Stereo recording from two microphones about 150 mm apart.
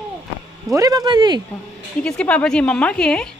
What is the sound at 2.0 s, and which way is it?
Speech, 10° left (ahead or behind).